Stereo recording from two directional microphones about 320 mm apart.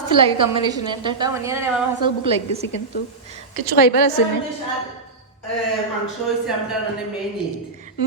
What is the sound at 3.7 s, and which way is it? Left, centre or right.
Speech, left.